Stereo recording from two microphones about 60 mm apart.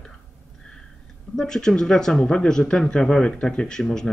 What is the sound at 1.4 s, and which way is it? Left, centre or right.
Speech, centre.